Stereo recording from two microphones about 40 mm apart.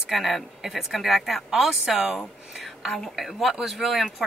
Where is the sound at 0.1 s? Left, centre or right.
Centre.